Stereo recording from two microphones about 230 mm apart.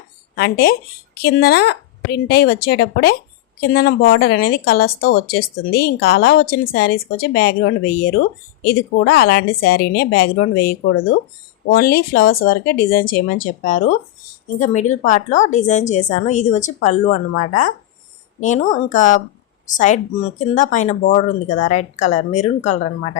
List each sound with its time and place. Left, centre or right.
0.3 s a woman's voice: left
8.6 s a woman's voice: left